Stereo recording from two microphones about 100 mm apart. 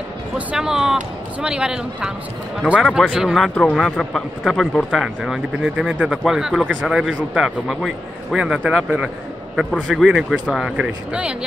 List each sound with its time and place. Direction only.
0.5 s a man's voice: 5° right (ahead or behind)